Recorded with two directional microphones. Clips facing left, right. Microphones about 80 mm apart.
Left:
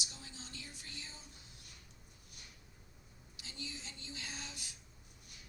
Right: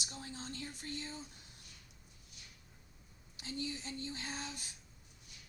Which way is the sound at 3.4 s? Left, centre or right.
Right.